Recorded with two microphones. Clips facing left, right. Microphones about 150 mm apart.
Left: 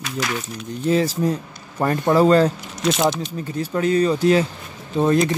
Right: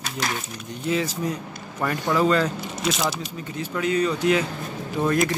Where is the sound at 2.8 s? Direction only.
Centre (ahead or behind).